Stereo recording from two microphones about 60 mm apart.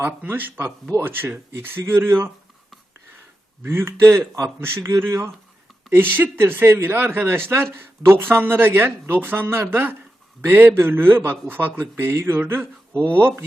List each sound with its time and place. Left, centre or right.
0.3 s speech: right
3.6 s speech: right
5.9 s speech: right